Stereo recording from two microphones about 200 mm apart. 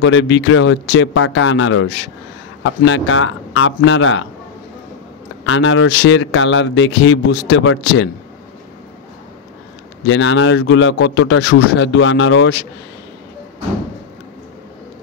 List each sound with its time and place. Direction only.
0.0 s speech: 65° left (ahead or behind); by 1.9 s 85° left
2.6 s speech: 75° left (ahead or behind)
5.4 s speech: 75° left (ahead or behind)
10.0 s speech: 70° left (ahead or behind)